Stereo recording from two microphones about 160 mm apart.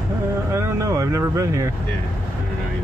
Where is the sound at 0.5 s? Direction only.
15° right (ahead or behind).